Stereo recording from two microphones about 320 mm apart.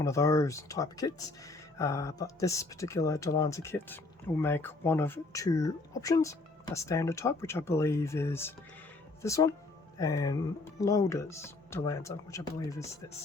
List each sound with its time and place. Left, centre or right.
0.0 s speech: centre